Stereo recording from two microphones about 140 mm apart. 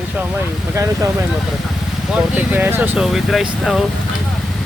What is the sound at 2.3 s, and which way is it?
Speech, 10° right (ahead or behind).